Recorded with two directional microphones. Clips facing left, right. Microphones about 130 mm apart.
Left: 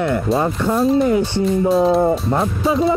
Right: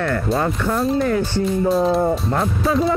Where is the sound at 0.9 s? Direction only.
20° left (ahead or behind).